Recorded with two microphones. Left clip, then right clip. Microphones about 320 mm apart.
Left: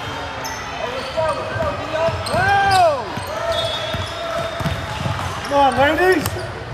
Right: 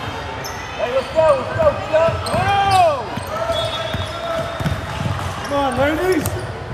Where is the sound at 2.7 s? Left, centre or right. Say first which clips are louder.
Right 2 dB; left.